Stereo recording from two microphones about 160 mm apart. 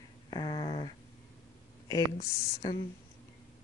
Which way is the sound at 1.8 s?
20° left (ahead or behind).